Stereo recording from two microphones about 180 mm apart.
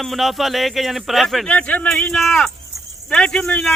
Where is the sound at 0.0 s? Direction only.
Centre (ahead or behind).